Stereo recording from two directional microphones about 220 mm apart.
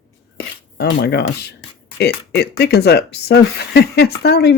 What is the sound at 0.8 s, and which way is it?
Speech, 50° left (ahead or behind).